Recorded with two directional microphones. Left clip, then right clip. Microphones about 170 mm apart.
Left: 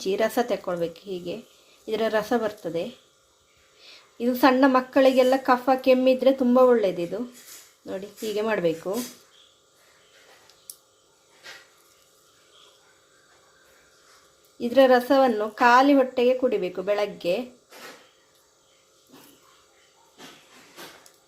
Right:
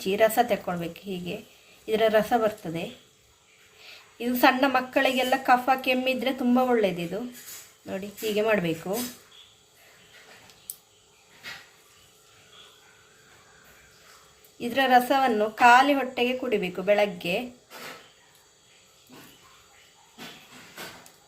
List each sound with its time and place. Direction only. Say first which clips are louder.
0.0 s a woman's voice: right 2 dB; 50° left (ahead or behind)
3.8 s a woman's voice: left 4 dB; 50° left (ahead or behind)
14.6 s a woman's voice: left 3 dB; 50° left (ahead or behind)